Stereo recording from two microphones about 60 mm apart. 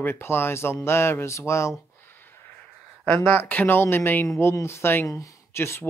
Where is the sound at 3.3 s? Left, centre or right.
Left.